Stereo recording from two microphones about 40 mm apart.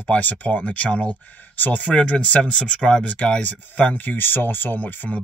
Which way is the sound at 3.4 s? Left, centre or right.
Left.